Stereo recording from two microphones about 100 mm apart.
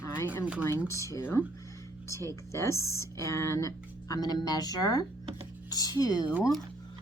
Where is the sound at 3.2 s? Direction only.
30° left (ahead or behind).